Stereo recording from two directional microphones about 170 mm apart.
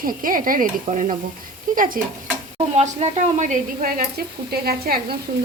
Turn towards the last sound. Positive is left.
turn(degrees=-65)  # may be behind; listen again after turning